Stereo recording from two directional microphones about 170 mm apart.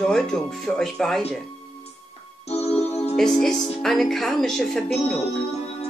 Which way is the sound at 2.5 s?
40° left (ahead or behind).